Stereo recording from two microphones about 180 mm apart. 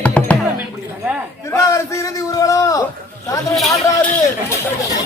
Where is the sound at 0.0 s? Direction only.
5° left (ahead or behind).